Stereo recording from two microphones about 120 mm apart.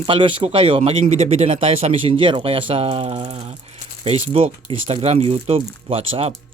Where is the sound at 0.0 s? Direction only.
45° right (ahead or behind).